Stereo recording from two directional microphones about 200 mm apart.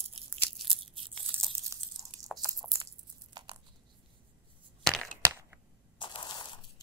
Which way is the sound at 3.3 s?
25° right (ahead or behind).